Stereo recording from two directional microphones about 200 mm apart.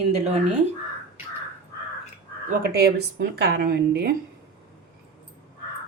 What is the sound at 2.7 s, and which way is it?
Speech, 55° right (ahead or behind).